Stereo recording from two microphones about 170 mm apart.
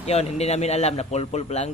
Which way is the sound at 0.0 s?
40° left (ahead or behind).